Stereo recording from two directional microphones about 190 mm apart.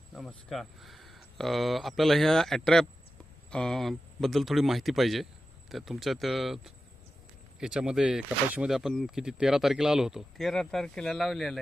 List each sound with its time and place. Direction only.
0.1 s speech: centre (ahead or behind)